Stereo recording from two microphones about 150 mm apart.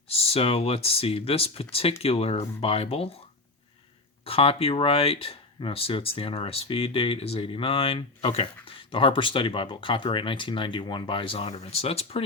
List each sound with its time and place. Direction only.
0.1 s speech: 40° left (ahead or behind)
4.3 s speech: 40° left (ahead or behind)